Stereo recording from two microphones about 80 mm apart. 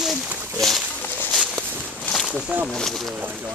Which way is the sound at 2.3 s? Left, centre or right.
Centre.